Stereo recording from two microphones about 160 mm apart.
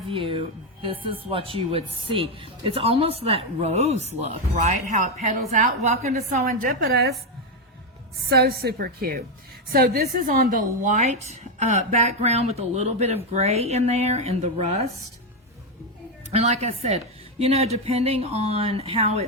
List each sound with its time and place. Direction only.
0.1 s speech: 35° right (ahead or behind)
6.4 s a woman's voice: 65° right (ahead or behind); by 7.1 s 80° right
8.3 s a woman's voice: 80° right; by 14.8 s 40° right (ahead or behind)
16.4 s speech: 40° right (ahead or behind)